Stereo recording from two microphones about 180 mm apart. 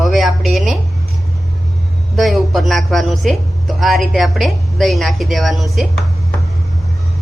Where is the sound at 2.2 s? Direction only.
Centre (ahead or behind).